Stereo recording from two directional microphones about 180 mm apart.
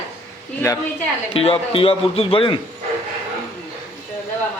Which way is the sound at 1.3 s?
30° left (ahead or behind).